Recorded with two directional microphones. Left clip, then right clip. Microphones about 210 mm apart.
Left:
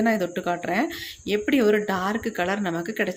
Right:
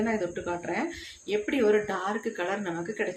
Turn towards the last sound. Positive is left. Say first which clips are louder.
# left 5 dB
turn(degrees=45)  # may be behind; listen again after turning